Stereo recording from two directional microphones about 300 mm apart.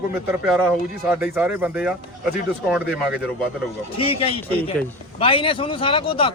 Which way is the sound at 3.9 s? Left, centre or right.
Centre.